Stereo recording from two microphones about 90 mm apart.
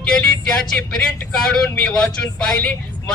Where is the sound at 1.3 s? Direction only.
10° left (ahead or behind).